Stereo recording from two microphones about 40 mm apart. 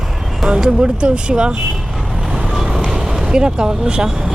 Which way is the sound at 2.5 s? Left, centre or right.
Centre.